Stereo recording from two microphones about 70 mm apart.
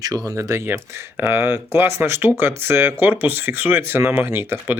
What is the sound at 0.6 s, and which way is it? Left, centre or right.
Speech, right.